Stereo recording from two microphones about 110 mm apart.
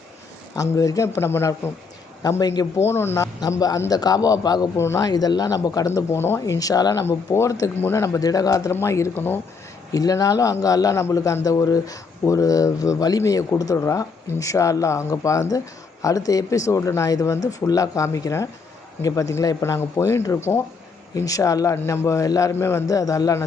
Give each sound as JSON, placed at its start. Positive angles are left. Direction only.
{"t": 0.5, "sound": "speech", "side_deg": 30}
{"t": 2.7, "sound": "speech", "side_deg": 25}
{"t": 3.4, "sound": "a man's voice", "side_deg": 35}
{"t": 9.9, "sound": "a man's voice", "side_deg": 35}